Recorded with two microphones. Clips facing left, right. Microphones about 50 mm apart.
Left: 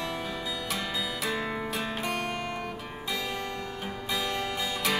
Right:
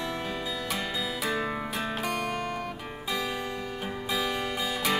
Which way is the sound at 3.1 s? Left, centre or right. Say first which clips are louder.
Right 2 dB; centre.